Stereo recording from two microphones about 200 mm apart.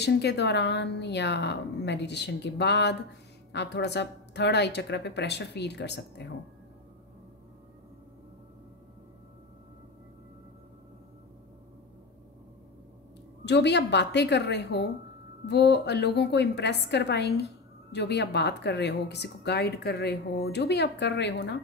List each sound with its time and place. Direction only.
0.0 s speech: 55° left (ahead or behind)
13.5 s speech: 60° left (ahead or behind)